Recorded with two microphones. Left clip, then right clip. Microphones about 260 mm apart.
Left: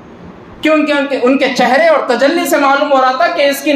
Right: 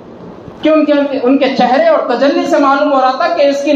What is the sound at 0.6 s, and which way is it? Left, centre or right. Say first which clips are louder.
A woman's voice: right 2 dB; left.